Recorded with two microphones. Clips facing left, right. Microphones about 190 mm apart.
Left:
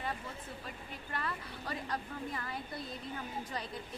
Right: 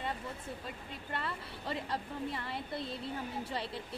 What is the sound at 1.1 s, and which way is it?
A woman's voice, 25° right (ahead or behind).